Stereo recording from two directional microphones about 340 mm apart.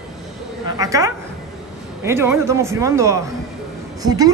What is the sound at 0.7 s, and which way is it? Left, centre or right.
Speech, centre.